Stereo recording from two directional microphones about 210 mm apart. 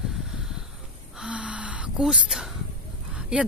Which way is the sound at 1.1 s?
5° right (ahead or behind).